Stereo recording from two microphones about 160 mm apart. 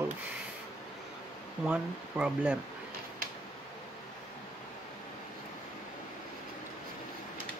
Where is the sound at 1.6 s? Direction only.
5° right (ahead or behind).